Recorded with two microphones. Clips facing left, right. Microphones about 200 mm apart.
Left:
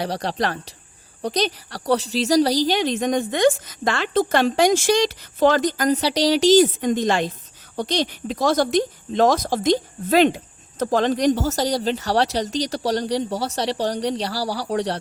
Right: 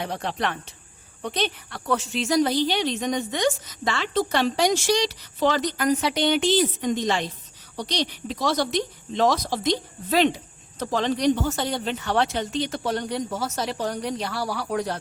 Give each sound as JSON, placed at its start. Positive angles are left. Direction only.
{"t": 0.0, "sound": "a woman's voice", "side_deg": 35}